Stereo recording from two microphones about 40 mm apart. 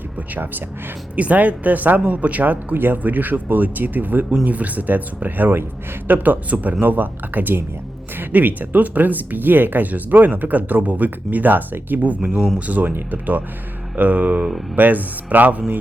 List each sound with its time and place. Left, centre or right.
1.1 s speech: right
4.4 s speech: right
12.0 s speech: right